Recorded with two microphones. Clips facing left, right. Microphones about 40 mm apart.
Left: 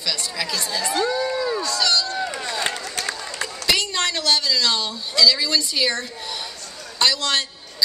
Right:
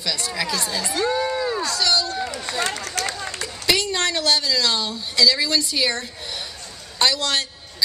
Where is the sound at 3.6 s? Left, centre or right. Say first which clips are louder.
Right 1 dB; centre.